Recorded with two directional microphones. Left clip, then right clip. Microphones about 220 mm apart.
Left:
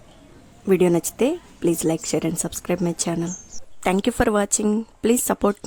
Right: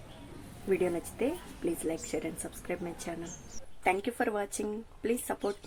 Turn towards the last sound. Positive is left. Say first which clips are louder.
# left 12 dB
turn(degrees=45)  # may be behind; listen again after turning